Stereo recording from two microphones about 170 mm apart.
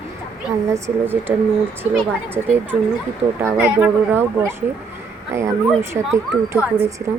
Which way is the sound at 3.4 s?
10° right (ahead or behind).